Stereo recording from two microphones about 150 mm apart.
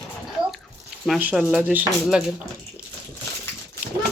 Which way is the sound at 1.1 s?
10° right (ahead or behind).